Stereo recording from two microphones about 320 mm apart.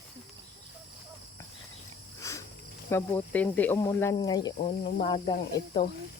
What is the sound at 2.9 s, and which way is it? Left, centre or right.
Speech, centre.